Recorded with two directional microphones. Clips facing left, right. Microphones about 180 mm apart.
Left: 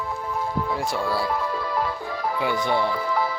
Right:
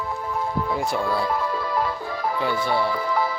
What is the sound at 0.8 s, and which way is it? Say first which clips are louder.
Speech: right 2 dB; centre (ahead or behind).